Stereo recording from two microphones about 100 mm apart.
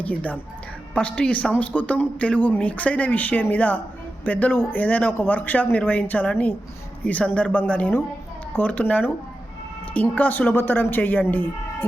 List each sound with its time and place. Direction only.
0.0 s speech: 15° left (ahead or behind)